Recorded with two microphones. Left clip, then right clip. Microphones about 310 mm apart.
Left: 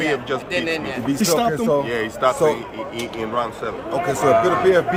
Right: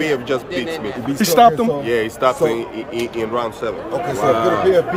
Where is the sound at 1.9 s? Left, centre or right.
Right.